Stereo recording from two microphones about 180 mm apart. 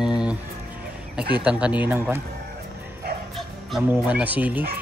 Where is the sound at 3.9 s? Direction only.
10° right (ahead or behind).